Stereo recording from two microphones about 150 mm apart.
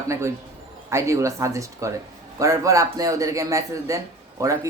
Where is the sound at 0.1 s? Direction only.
20° right (ahead or behind).